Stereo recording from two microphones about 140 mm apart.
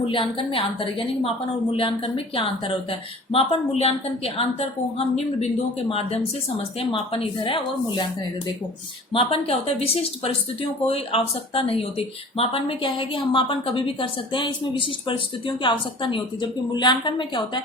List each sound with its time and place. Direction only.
0.0 s speech: 40° left (ahead or behind)
9.1 s speech: 45° left (ahead or behind)